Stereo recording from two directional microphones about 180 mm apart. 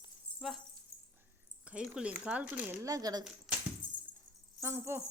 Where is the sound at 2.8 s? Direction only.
20° right (ahead or behind).